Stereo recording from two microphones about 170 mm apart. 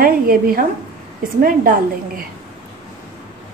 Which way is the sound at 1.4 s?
55° right (ahead or behind).